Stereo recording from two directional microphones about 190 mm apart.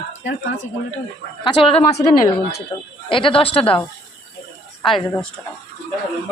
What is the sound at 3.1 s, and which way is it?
Speech, 25° left (ahead or behind).